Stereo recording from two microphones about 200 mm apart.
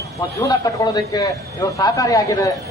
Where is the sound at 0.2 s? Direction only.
15° left (ahead or behind).